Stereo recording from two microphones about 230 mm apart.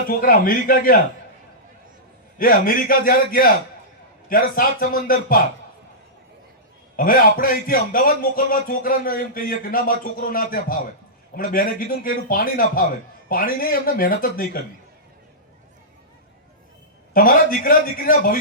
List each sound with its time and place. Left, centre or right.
0.1 s a man's voice: left
2.4 s a man's voice: left
6.9 s a man's voice: left
17.2 s a man's voice: left